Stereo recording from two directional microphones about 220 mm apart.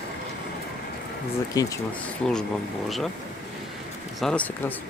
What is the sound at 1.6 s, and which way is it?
Speech, 15° left (ahead or behind).